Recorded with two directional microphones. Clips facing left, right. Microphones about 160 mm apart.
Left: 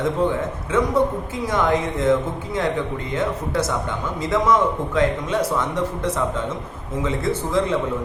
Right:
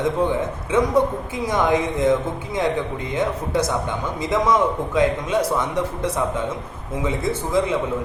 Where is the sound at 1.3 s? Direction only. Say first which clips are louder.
Right 1 dB; 15° right (ahead or behind).